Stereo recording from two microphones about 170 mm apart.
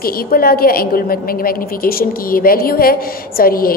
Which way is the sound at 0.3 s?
60° left (ahead or behind).